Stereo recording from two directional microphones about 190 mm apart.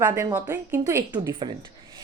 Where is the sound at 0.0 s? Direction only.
20° right (ahead or behind).